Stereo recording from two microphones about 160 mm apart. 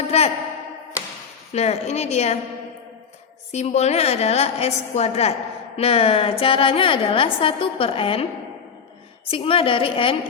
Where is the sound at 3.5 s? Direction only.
45° left (ahead or behind).